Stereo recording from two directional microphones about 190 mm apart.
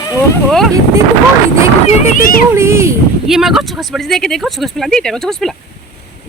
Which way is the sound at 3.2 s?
Centre (ahead or behind).